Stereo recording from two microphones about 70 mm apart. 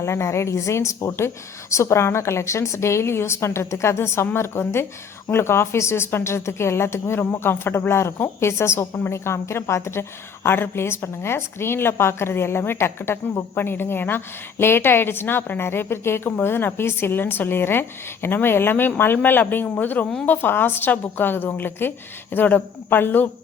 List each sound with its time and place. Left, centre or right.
0.0 s a woman's voice: left